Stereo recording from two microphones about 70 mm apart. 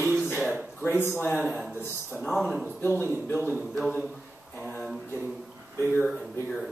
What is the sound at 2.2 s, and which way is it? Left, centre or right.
Speech, centre.